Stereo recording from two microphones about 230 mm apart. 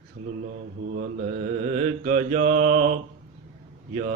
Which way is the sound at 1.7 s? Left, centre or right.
Right.